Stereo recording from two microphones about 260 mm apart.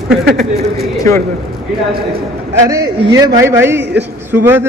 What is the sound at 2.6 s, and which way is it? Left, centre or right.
A man's voice, centre.